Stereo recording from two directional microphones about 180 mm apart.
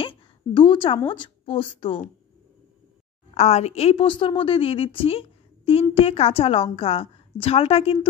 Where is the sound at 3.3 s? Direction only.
35° left (ahead or behind).